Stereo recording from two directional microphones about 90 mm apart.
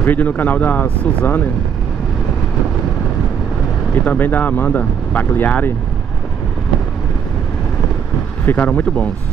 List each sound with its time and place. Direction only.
0.0 s speech: 20° left (ahead or behind)
4.0 s speech: 20° left (ahead or behind)
8.5 s speech: 20° left (ahead or behind)